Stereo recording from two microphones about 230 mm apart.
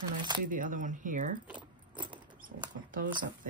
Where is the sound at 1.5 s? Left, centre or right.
Centre.